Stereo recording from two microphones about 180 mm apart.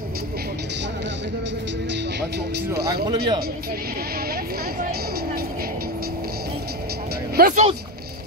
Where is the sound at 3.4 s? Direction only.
55° right (ahead or behind).